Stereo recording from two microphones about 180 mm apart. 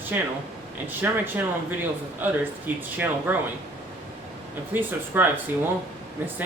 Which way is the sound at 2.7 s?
10° right (ahead or behind).